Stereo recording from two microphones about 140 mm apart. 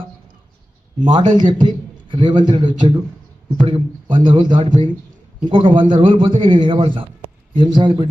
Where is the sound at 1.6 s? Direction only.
35° right (ahead or behind).